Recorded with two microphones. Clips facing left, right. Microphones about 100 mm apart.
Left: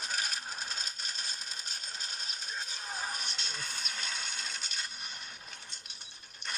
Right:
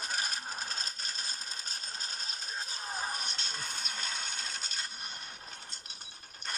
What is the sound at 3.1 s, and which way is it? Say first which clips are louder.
Music: right 1 dB; 40° right (ahead or behind).